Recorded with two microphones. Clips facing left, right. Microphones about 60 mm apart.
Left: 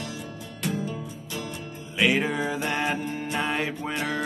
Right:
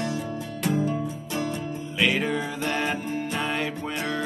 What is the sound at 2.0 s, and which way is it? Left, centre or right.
Music, centre.